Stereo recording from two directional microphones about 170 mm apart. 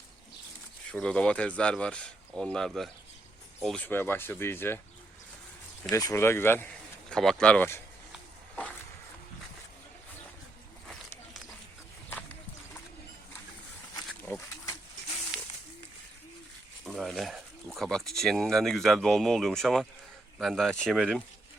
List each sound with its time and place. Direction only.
0.9 s a man's voice: 5° left (ahead or behind)
3.8 s a man's voice: 10° left (ahead or behind)
5.9 s a man's voice: 20° left (ahead or behind)
13.9 s wild animals: 20° left (ahead or behind)
16.8 s speech: centre (ahead or behind)